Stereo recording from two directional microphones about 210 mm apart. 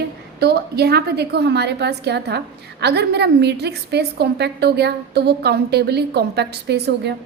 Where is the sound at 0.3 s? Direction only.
50° right (ahead or behind).